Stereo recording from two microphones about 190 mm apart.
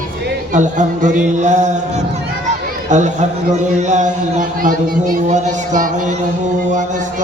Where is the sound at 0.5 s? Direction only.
40° right (ahead or behind).